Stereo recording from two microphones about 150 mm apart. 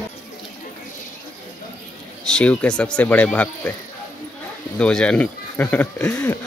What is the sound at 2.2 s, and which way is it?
Speech, 5° left (ahead or behind).